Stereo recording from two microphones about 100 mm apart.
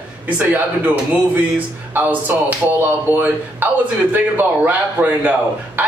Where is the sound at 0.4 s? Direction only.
15° right (ahead or behind).